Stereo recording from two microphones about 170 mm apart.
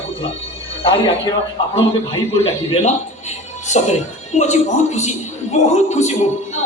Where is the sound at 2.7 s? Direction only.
40° left (ahead or behind).